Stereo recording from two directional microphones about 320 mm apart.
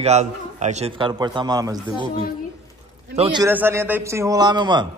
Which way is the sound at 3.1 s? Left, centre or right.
Centre.